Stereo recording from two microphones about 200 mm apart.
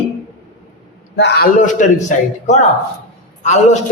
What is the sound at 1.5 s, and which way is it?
A man's voice, 40° left (ahead or behind).